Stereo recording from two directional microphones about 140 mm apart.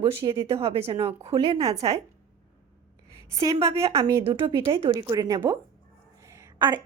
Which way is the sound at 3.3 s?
25° right (ahead or behind).